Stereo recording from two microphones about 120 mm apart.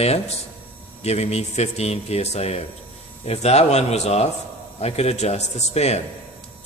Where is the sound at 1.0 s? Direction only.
60° left (ahead or behind).